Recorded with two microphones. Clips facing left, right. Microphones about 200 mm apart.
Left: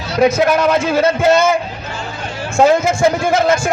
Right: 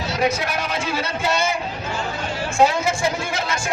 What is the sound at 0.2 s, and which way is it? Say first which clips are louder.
A man's voice: left 11 dB; 45° left (ahead or behind).